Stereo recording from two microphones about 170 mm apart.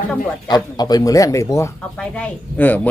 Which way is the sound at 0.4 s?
25° left (ahead or behind).